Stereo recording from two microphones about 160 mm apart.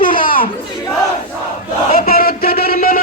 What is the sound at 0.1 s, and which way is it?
Chatter, 60° left (ahead or behind).